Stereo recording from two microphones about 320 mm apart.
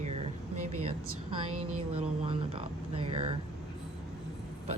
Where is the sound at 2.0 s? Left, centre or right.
Centre.